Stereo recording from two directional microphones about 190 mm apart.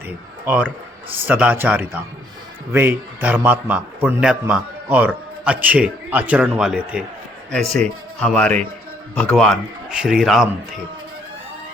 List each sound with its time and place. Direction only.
0.4 s a man's voice: 10° right (ahead or behind)